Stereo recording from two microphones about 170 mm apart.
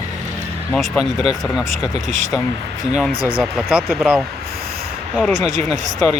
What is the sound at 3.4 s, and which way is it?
Speech, centre (ahead or behind).